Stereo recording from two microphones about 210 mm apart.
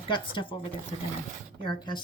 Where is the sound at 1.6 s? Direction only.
20° left (ahead or behind).